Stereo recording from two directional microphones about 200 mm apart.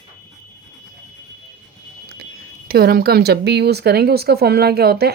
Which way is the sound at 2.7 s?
50° right (ahead or behind).